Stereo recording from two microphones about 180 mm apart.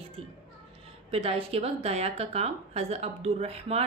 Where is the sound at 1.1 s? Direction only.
35° right (ahead or behind).